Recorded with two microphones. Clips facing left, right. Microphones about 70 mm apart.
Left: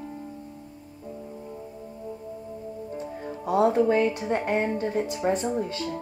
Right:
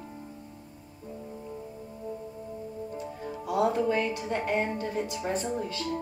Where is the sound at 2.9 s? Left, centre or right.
Left.